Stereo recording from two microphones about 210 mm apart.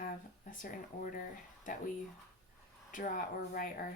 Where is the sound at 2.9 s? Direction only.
40° left (ahead or behind).